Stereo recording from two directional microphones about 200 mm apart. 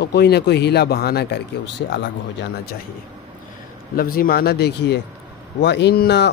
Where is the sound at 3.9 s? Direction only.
45° left (ahead or behind).